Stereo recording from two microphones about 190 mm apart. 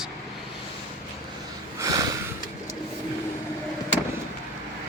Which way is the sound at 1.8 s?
20° right (ahead or behind).